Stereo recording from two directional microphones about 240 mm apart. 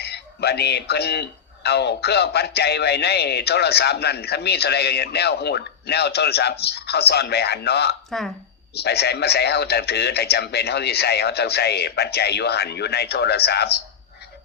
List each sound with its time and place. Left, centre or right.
0.0 s speech: left